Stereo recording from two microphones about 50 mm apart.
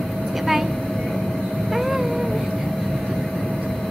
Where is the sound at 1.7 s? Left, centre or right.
Centre.